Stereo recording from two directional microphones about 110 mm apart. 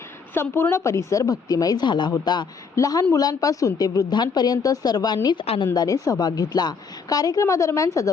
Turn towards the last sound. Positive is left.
turn(degrees=30)  # may be behind; listen again after turning